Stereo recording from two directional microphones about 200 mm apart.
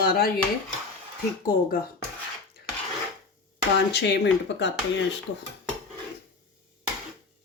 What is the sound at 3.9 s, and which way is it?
Speech, 60° left (ahead or behind).